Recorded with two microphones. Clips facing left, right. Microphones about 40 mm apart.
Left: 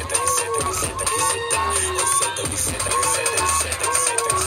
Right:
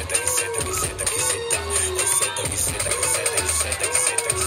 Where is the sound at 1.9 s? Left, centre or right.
Right.